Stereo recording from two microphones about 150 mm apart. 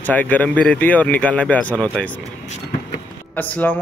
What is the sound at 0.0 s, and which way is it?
A man's voice, 10° left (ahead or behind).